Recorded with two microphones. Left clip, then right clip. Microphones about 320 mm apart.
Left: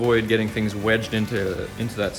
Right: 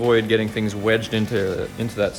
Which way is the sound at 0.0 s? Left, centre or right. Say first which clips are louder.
Right 2 dB; centre.